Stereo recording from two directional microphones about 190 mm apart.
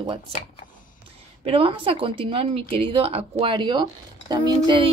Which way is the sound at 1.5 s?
30° right (ahead or behind).